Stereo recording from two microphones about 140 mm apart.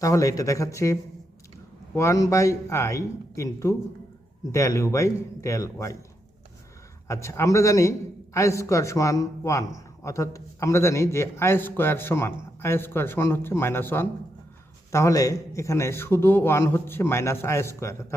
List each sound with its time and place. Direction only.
0.0 s a man's voice: 25° left (ahead or behind)
2.0 s a man's voice: 20° left (ahead or behind)
7.1 s a man's voice: 20° left (ahead or behind)